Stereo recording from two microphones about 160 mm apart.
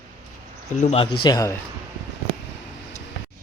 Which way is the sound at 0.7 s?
45° left (ahead or behind).